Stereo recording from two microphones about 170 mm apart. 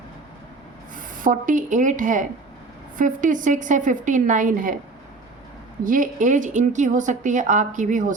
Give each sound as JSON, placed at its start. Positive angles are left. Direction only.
{"t": 0.9, "sound": "speech", "side_deg": -50}
{"t": 5.8, "sound": "speech", "side_deg": -50}